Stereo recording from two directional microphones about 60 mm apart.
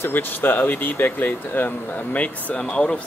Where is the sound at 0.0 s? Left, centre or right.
Left.